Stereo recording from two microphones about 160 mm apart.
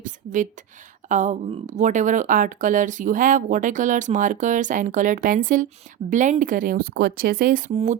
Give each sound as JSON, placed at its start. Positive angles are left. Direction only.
{"t": 0.0, "sound": "speech", "side_deg": -55}
{"t": 7.7, "sound": "speech", "side_deg": -40}